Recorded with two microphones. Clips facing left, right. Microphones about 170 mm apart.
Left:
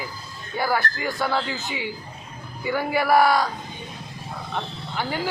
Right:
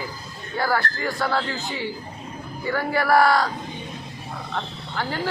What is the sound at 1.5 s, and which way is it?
A man's voice, 15° left (ahead or behind).